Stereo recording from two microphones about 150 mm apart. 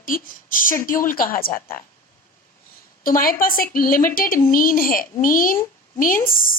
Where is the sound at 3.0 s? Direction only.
70° left (ahead or behind).